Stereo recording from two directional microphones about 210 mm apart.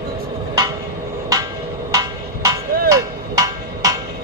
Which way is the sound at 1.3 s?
15° right (ahead or behind).